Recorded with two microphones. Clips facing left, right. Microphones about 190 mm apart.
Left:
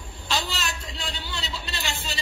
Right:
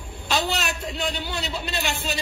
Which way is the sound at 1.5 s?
60° right (ahead or behind).